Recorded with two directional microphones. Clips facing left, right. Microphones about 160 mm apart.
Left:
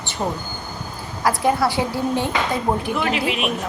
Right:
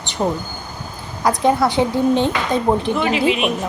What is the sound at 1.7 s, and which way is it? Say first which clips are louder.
Speech: right 5 dB; 20° right (ahead or behind).